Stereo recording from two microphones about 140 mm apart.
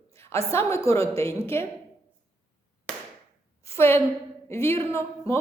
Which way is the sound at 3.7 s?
15° left (ahead or behind).